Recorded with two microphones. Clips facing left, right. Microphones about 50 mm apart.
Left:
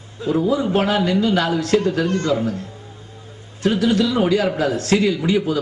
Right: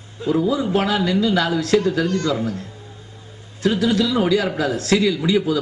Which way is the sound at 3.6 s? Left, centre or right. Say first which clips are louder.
Left 1 dB; left.